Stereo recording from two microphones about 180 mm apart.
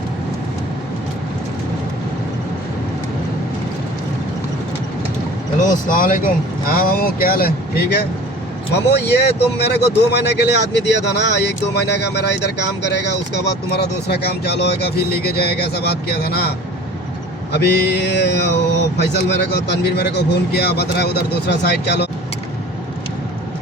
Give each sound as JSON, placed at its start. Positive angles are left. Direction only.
{"t": 5.5, "sound": "speech", "side_deg": 45}
{"t": 17.5, "sound": "mantra", "side_deg": 65}
{"t": 19.1, "sound": "speech", "side_deg": 70}